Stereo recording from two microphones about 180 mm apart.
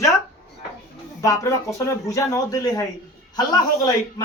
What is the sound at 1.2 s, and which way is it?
Speech, 15° left (ahead or behind).